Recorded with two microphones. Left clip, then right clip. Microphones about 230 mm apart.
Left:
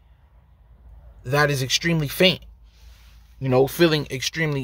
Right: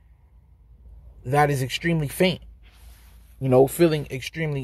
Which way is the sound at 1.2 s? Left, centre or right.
Centre.